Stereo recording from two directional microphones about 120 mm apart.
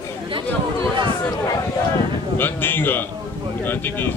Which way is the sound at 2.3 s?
15° left (ahead or behind).